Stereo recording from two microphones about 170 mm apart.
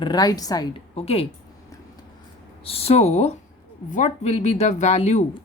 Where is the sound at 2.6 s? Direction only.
35° left (ahead or behind).